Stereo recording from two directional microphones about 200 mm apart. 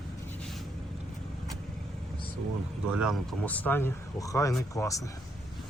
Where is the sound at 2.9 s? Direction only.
5° right (ahead or behind).